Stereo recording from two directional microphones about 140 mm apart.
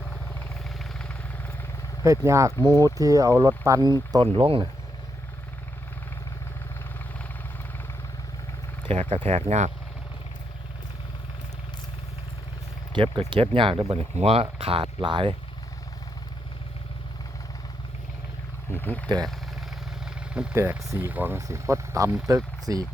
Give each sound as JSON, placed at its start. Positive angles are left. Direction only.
{"t": 0.0, "sound": "vehicle", "side_deg": 10}
{"t": 2.0, "sound": "speech", "side_deg": -20}
{"t": 4.3, "sound": "speech", "side_deg": -40}
{"t": 8.8, "sound": "speech", "side_deg": -45}
{"t": 12.9, "sound": "speech", "side_deg": -35}
{"t": 18.7, "sound": "speech", "side_deg": 15}
{"t": 20.1, "sound": "vehicle", "side_deg": -5}
{"t": 20.6, "sound": "speech", "side_deg": -20}